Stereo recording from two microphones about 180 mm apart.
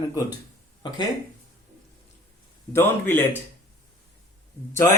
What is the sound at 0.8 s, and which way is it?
Speech, 25° left (ahead or behind).